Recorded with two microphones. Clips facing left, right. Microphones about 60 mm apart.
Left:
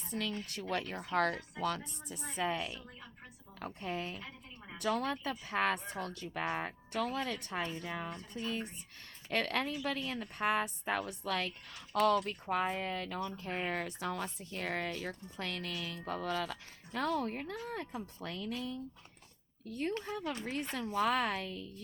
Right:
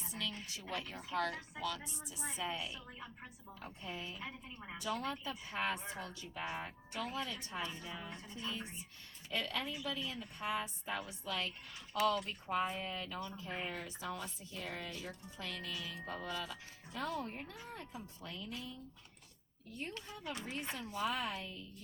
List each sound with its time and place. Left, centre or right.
0.1 s speech: left
4.2 s a woman's voice: centre
4.8 s speech: left
7.6 s speech: left
7.9 s speech: left
8.3 s speech: left
9.3 s speech: left
20.3 s speech: left
20.9 s speech: left